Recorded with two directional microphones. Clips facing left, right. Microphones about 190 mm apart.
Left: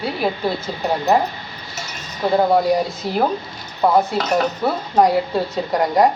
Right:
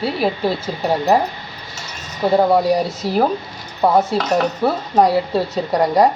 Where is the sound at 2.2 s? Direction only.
10° right (ahead or behind).